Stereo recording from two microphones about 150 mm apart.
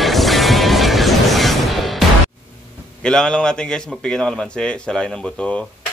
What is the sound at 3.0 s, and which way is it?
A man's voice, 5° left (ahead or behind).